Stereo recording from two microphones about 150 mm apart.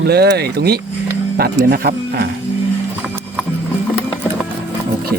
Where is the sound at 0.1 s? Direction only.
90° right.